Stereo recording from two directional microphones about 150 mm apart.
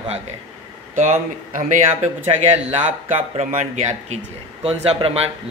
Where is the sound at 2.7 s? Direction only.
45° right (ahead or behind).